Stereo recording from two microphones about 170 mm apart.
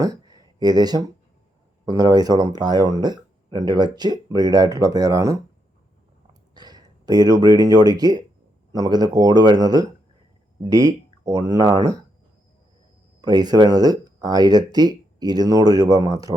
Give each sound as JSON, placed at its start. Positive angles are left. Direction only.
{"t": 0.0, "sound": "speech", "side_deg": -20}
{"t": 6.5, "sound": "speech", "side_deg": -25}
{"t": 13.2, "sound": "speech", "side_deg": -25}